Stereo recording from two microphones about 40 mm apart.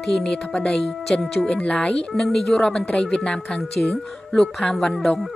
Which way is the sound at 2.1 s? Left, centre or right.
Centre.